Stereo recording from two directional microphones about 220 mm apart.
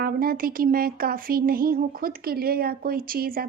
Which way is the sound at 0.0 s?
40° right (ahead or behind).